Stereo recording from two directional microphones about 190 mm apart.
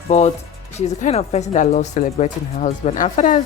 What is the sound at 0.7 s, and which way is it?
Speech, 35° left (ahead or behind).